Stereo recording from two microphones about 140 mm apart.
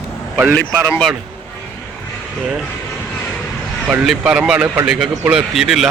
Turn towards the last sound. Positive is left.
turn(degrees=0)  # may be behind; listen again after turning